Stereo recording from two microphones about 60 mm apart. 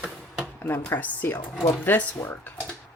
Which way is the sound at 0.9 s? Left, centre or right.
Left.